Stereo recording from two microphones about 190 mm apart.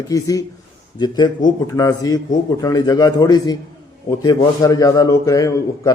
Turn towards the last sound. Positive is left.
turn(degrees=15)  # may be behind; listen again after turning